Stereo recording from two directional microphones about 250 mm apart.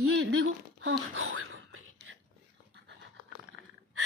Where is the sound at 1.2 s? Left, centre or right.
Right.